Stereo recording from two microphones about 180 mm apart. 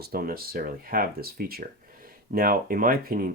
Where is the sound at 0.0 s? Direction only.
55° right (ahead or behind).